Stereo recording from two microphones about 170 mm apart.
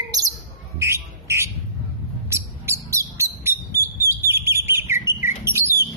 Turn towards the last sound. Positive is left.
turn(degrees=-15)  # may be behind; listen again after turning